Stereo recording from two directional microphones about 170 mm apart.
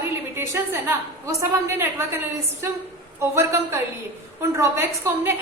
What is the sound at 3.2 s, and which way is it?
A woman's voice, 15° right (ahead or behind).